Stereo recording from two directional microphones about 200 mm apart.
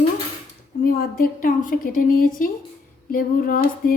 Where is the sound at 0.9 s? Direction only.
45° left (ahead or behind).